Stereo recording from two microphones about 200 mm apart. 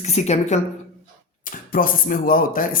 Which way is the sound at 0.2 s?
35° left (ahead or behind).